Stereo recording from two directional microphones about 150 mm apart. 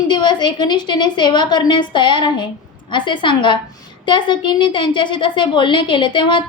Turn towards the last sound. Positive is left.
turn(degrees=35)  # may be behind; listen again after turning